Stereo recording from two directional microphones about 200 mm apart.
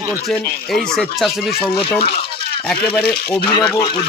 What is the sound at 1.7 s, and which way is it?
Speech, 25° left (ahead or behind).